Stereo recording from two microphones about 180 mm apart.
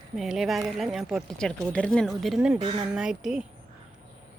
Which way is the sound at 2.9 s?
5° right (ahead or behind).